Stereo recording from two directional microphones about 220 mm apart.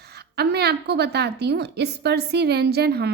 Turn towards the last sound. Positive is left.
turn(degrees=-45)  # may be behind; listen again after turning